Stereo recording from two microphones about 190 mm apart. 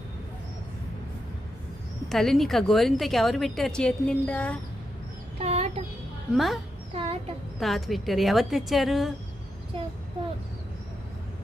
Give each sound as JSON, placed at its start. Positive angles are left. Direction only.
{"t": 2.0, "sound": "a woman's voice", "side_deg": 0}
{"t": 5.4, "sound": "a sound", "side_deg": -30}
{"t": 6.3, "sound": "a woman's voice", "side_deg": 0}
{"t": 6.9, "sound": "speech", "side_deg": -30}
{"t": 7.6, "sound": "a woman's voice", "side_deg": 0}
{"t": 9.7, "sound": "a child's voice", "side_deg": -25}